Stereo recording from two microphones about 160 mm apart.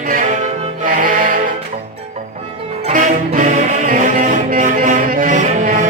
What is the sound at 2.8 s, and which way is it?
Music, 45° right (ahead or behind).